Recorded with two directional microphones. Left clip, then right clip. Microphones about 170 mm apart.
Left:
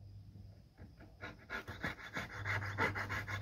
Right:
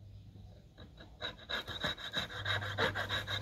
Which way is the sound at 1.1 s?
35° left (ahead or behind).